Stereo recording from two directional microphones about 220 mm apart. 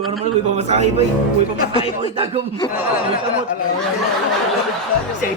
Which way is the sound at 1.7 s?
25° left (ahead or behind).